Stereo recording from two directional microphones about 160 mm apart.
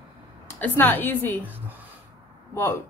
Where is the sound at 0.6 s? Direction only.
10° left (ahead or behind).